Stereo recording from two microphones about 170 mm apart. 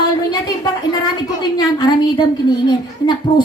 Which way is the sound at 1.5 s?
25° left (ahead or behind).